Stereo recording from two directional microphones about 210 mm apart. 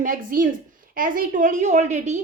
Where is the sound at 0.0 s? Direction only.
40° right (ahead or behind).